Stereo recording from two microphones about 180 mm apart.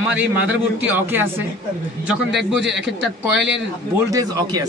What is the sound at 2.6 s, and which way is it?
Speech, 85° right.